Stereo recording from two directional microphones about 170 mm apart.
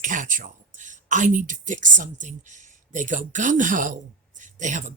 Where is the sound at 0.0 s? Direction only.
50° right (ahead or behind).